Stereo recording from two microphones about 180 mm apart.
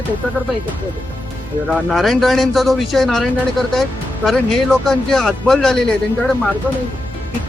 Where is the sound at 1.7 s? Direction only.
Centre (ahead or behind).